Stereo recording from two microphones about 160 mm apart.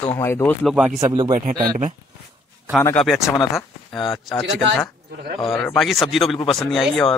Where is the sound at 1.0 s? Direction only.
25° right (ahead or behind).